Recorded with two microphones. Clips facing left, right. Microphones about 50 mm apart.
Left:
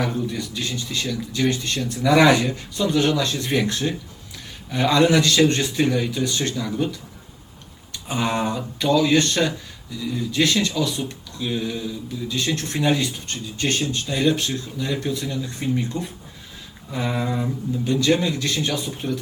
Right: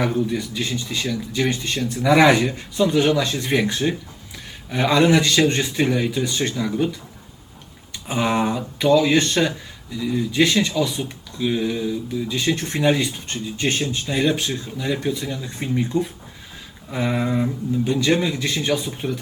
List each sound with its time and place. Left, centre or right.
0.0 s speech: right
2.5 s speech: right
7.9 s a sound: centre
8.9 s speech: right